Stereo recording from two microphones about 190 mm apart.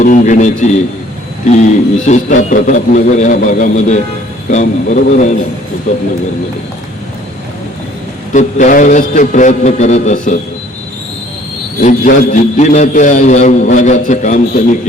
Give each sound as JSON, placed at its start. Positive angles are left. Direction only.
{"t": 0.0, "sound": "a man's voice", "side_deg": 40}
{"t": 8.3, "sound": "a man's voice", "side_deg": 40}
{"t": 11.8, "sound": "a man's voice", "side_deg": 40}